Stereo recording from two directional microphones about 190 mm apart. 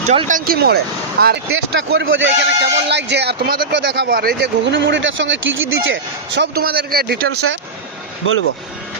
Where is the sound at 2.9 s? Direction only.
65° right (ahead or behind).